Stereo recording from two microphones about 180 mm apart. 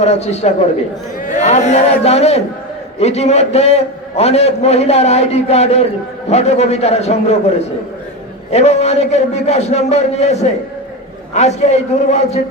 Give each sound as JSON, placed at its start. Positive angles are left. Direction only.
{"t": 0.0, "sound": "a man's voice", "side_deg": 35}
{"t": 8.5, "sound": "a man's voice", "side_deg": 35}